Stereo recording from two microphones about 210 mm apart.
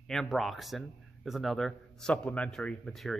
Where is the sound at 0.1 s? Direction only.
Centre (ahead or behind).